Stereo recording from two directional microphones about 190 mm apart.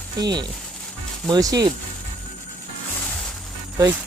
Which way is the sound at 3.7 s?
15° right (ahead or behind).